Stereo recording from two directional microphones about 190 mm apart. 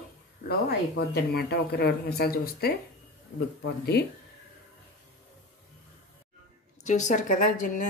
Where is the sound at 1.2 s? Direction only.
55° left (ahead or behind).